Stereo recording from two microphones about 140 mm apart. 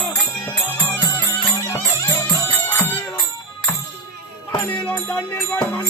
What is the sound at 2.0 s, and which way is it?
Music, 25° left (ahead or behind).